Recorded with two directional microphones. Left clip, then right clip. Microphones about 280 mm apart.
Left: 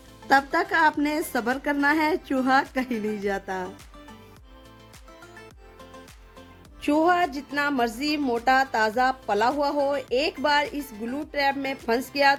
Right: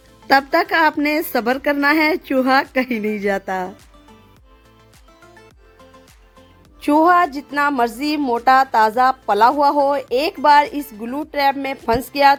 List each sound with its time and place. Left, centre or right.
0.3 s speech: centre
6.8 s speech: centre